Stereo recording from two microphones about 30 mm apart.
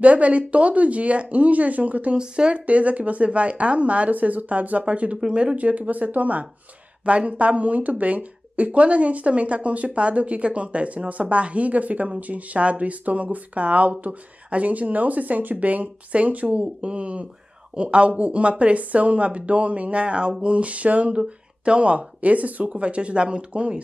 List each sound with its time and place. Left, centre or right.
0.0 s speech: right
2.1 s speech: right
2.6 s speech: right
5.6 s speech: right
7.1 s speech: right
16.8 s speech: right
21.1 s speech: right